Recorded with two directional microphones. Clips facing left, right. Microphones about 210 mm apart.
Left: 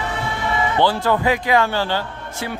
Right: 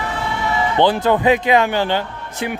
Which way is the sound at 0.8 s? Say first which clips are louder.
Right 3 dB; 20° right (ahead or behind).